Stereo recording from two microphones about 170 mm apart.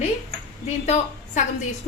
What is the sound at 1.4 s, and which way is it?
Speech, 45° left (ahead or behind).